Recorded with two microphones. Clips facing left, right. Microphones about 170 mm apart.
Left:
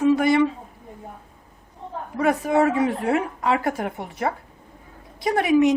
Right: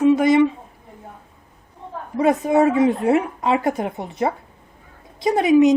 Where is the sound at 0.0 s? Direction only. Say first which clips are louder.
Right 3 dB; 20° right (ahead or behind).